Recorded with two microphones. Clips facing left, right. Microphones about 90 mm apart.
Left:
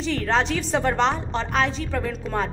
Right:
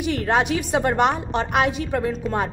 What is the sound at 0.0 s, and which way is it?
A woman's voice, 15° right (ahead or behind).